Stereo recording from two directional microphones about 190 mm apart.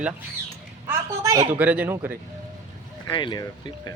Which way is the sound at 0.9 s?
20° right (ahead or behind).